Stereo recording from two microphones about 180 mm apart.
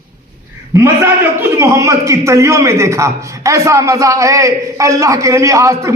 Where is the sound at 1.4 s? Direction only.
15° right (ahead or behind).